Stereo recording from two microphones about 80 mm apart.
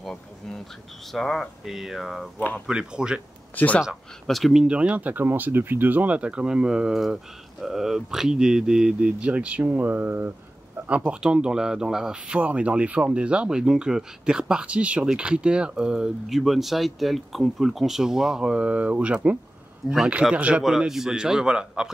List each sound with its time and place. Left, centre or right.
0.0 s bee: centre
1.1 s speech: centre
3.5 s speech: centre
3.8 s speech: centre; by 10.3 s right
11.1 s speech: centre
20.6 s speech: centre